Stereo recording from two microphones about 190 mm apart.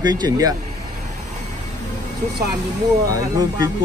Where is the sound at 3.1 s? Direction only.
20° right (ahead or behind).